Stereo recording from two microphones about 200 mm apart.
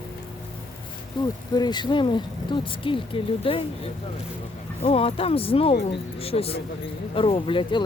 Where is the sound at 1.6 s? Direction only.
20° left (ahead or behind).